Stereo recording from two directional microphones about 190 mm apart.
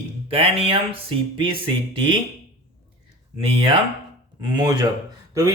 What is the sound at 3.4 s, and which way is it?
Speech, 30° right (ahead or behind).